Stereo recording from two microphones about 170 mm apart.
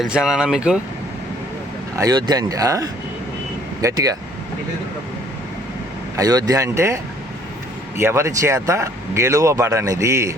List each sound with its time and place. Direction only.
0.0 s speech: 5° right (ahead or behind)
2.0 s speech: 25° right (ahead or behind)
6.1 s speech: 20° right (ahead or behind)